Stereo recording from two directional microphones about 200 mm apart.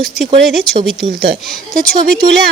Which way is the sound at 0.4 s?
Centre (ahead or behind).